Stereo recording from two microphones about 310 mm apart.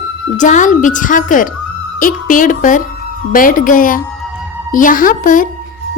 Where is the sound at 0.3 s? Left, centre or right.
Left.